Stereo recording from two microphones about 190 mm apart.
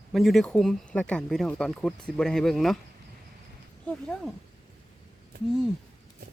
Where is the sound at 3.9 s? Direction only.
5° left (ahead or behind).